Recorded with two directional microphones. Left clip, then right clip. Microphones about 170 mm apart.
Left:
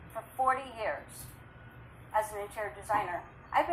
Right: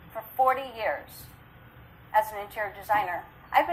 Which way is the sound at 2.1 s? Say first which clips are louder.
Right 6 dB; 40° right (ahead or behind).